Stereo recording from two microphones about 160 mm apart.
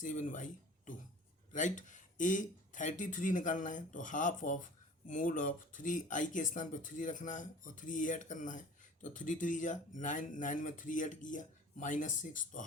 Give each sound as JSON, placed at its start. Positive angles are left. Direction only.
{"t": 0.0, "sound": "speech", "side_deg": 50}